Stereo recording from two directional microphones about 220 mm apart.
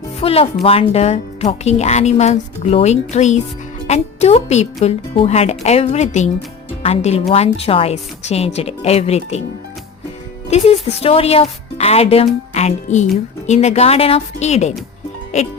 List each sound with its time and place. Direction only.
0.2 s speech: 25° left (ahead or behind)
10.5 s speech: 30° left (ahead or behind)